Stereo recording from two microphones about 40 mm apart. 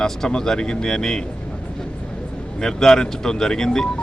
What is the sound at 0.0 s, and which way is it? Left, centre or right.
Speech, centre.